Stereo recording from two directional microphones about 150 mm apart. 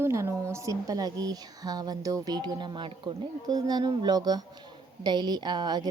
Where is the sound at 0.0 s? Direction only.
20° right (ahead or behind).